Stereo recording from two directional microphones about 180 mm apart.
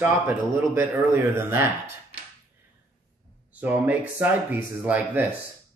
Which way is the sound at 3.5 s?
10° right (ahead or behind).